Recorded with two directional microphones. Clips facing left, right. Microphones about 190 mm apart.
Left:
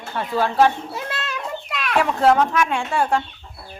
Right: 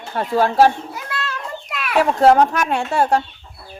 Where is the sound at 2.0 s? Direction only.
40° right (ahead or behind).